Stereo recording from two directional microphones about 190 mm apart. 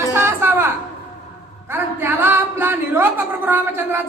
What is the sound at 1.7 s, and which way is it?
Speech, 10° right (ahead or behind).